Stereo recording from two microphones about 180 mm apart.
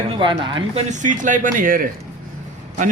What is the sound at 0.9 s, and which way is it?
A man's voice, 45° right (ahead or behind).